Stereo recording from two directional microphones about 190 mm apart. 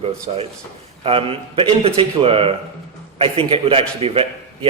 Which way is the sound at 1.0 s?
30° right (ahead or behind).